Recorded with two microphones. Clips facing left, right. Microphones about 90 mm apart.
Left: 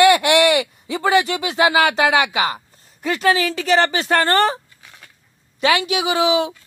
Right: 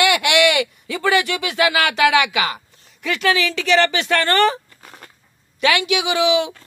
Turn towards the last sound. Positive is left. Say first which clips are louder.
# even
turn(degrees=35)  # may be behind; listen again after turning